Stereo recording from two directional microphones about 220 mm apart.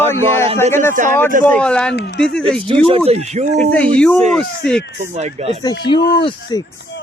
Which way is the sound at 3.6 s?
5° left (ahead or behind).